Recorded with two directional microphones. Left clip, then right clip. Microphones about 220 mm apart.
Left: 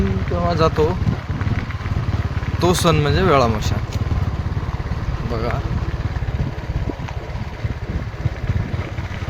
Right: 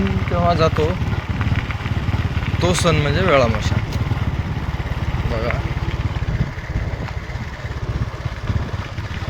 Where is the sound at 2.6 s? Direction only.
25° left (ahead or behind).